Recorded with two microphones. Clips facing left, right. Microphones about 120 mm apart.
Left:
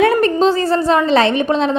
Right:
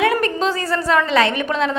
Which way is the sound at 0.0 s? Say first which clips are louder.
Left 6 dB; 35° left (ahead or behind).